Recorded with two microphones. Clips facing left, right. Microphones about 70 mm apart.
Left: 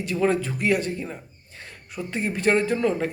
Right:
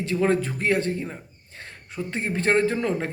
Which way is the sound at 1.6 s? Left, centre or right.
Right.